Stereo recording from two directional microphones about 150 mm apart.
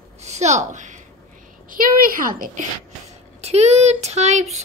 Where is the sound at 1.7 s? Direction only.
70° right (ahead or behind).